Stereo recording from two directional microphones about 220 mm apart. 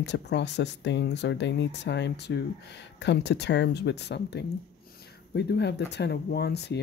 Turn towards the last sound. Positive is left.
turn(degrees=50)  # may be behind; listen again after turning